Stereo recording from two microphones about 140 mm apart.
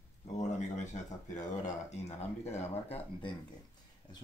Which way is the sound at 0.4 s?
55° left (ahead or behind).